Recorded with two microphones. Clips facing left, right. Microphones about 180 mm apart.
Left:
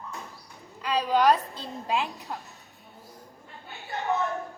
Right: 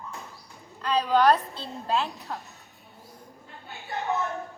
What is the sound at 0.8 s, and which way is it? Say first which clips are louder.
A woman's voice: right 1 dB; 10° left (ahead or behind).